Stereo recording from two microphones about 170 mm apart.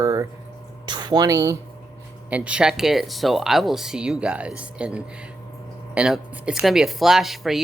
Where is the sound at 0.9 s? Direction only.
25° right (ahead or behind).